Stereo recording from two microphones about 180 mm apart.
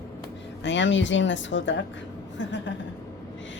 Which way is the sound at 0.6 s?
85° left.